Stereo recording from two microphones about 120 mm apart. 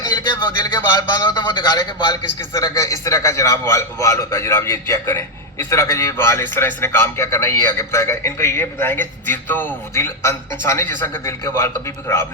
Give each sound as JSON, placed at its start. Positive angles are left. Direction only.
{"t": 0.0, "sound": "a man's voice", "side_deg": 35}